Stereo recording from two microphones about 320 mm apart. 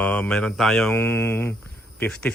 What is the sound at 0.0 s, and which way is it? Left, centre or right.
Speech, centre.